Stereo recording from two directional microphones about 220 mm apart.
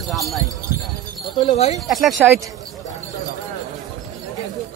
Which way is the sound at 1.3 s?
25° left (ahead or behind).